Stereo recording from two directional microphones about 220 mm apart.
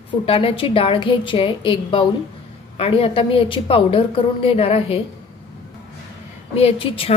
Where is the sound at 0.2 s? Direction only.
25° left (ahead or behind).